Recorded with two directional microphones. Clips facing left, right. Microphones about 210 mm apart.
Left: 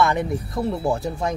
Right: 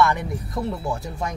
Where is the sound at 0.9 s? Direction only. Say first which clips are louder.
Left 5 dB; 30° left (ahead or behind).